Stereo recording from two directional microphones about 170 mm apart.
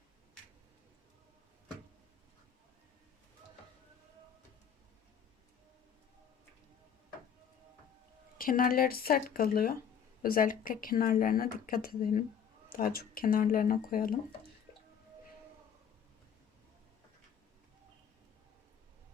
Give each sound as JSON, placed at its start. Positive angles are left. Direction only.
{"t": 8.4, "sound": "speech", "side_deg": 55}